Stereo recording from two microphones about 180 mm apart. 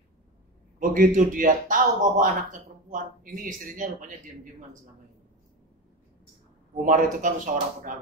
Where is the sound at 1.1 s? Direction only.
45° right (ahead or behind).